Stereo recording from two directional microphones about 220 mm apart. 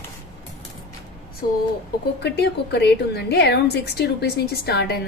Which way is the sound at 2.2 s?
50° left (ahead or behind).